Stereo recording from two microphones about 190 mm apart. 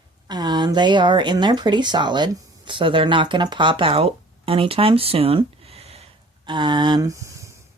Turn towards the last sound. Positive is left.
turn(degrees=-15)  # may be behind; listen again after turning